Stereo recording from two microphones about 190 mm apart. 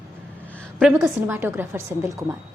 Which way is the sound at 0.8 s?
Centre (ahead or behind).